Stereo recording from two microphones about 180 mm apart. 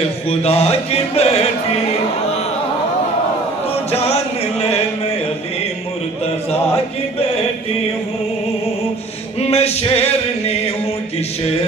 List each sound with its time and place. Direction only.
0.3 s music: 35° left (ahead or behind)
3.9 s music: 35° left (ahead or behind)
9.4 s music: 35° left (ahead or behind)